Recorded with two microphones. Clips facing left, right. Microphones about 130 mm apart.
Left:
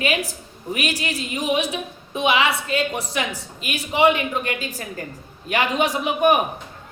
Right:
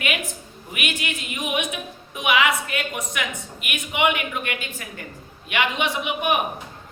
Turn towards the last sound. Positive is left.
turn(degrees=40)  # may be behind; listen again after turning